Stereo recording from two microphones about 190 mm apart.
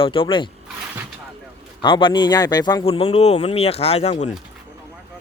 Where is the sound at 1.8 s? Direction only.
25° left (ahead or behind).